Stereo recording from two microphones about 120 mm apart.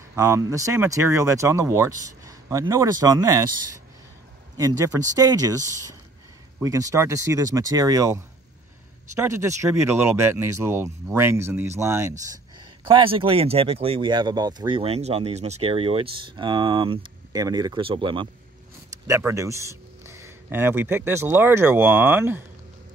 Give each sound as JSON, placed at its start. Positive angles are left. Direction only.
{"t": 0.1, "sound": "speech", "side_deg": -20}
{"t": 4.6, "sound": "speech", "side_deg": -25}
{"t": 12.5, "sound": "speech", "side_deg": -45}
{"t": 17.3, "sound": "speech", "side_deg": -30}
{"t": 17.7, "sound": "speech", "side_deg": -45}
{"t": 19.0, "sound": "speech", "side_deg": -25}